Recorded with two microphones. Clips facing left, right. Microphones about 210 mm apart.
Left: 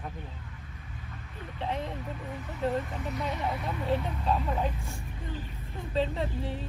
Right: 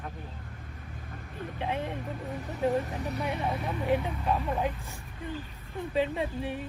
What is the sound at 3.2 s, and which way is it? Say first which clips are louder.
Speech: right 1 dB; 15° right (ahead or behind).